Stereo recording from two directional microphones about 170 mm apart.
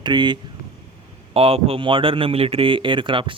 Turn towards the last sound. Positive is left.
turn(degrees=-30)  # may be behind; listen again after turning